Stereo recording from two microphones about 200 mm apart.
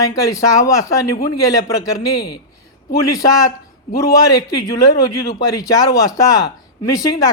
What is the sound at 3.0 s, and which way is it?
Speech, 15° left (ahead or behind).